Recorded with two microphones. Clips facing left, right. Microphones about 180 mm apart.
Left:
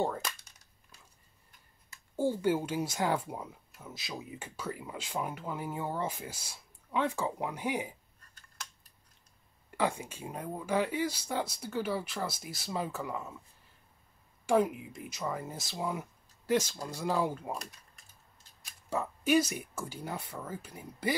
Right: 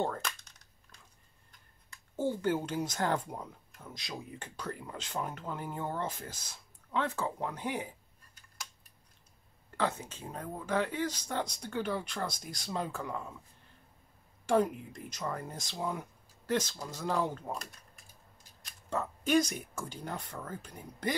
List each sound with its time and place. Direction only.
0.0 s cap gun: 10° left (ahead or behind)
1.9 s speech: 10° left (ahead or behind)
9.8 s speech: 10° left (ahead or behind)
14.4 s speech: 10° left (ahead or behind)
18.6 s speech: 10° left (ahead or behind)